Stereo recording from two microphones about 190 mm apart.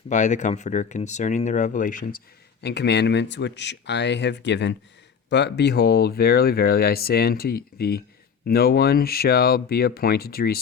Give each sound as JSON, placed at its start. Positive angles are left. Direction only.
{"t": 0.1, "sound": "speech", "side_deg": 40}